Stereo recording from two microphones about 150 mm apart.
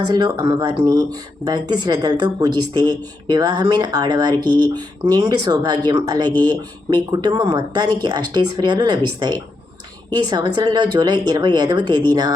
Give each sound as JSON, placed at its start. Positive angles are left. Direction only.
{"t": 0.1, "sound": "speech", "side_deg": -30}